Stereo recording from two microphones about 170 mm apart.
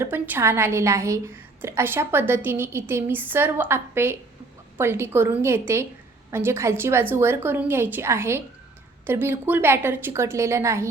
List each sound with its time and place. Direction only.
0.0 s a woman's voice: 15° right (ahead or behind)